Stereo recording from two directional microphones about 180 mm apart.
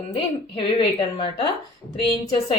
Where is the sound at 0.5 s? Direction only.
30° left (ahead or behind).